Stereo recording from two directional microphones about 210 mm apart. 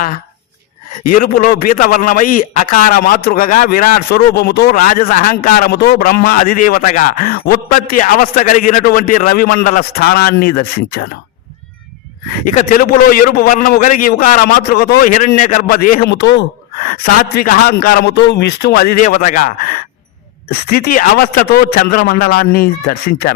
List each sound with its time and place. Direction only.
1.0 s a man's voice: 40° left (ahead or behind)
4.8 s a man's voice: 40° left (ahead or behind)
12.5 s a man's voice: 45° left (ahead or behind)
16.8 s a man's voice: 40° left (ahead or behind)